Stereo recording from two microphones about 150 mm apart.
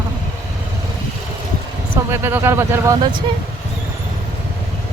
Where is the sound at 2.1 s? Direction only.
15° right (ahead or behind).